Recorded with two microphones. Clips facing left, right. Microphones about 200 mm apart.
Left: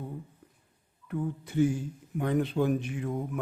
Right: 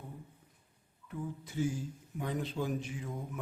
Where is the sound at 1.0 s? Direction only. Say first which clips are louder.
Left 8 dB; 65° left (ahead or behind).